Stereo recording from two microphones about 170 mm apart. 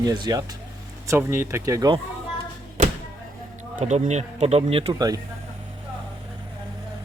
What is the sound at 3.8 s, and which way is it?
Speech, 45° right (ahead or behind).